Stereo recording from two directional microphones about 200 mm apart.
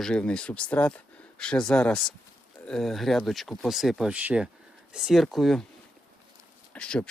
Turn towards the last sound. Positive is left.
turn(degrees=5)  # may be behind; listen again after turning